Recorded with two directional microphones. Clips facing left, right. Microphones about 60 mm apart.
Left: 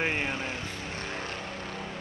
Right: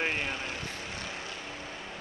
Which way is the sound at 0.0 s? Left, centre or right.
Left.